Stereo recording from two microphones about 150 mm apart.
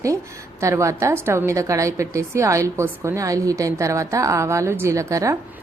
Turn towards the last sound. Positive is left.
turn(degrees=-20)  # may be behind; listen again after turning